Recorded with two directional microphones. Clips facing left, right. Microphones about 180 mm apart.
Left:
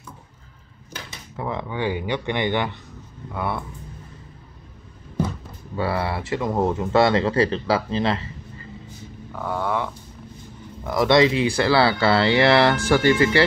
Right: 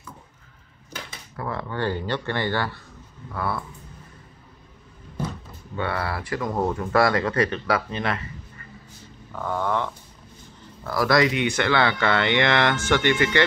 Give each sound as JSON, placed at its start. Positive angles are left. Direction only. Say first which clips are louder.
{"t": 1.3, "sound": "speech", "louder": "left 2 dB", "side_deg": 15}
{"t": 5.8, "sound": "speech", "louder": "left 3 dB", "side_deg": 30}
{"t": 9.3, "sound": "speech", "louder": "even", "side_deg": 10}
{"t": 10.8, "sound": "speech", "louder": "left 3 dB", "side_deg": 20}